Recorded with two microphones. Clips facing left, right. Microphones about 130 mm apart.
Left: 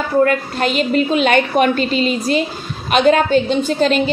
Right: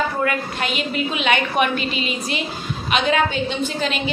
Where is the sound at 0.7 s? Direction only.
40° left (ahead or behind).